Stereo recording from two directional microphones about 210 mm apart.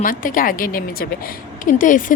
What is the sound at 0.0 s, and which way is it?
A woman's voice, 40° left (ahead or behind).